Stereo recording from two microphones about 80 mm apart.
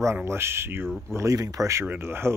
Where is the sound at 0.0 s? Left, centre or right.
Right.